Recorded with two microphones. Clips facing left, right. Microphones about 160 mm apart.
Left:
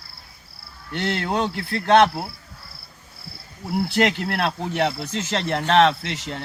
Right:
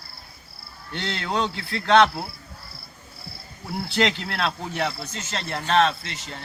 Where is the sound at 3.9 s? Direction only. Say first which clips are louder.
Left 1 dB; 55° left (ahead or behind).